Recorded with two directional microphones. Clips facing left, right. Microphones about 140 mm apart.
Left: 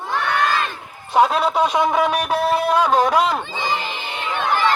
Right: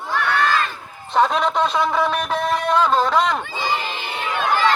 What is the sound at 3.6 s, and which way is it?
Crowd, 20° left (ahead or behind).